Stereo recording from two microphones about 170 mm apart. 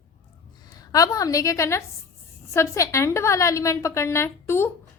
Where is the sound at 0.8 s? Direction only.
20° left (ahead or behind).